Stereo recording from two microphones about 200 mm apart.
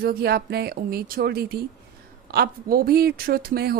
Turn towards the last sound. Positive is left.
turn(degrees=-50)  # may be behind; listen again after turning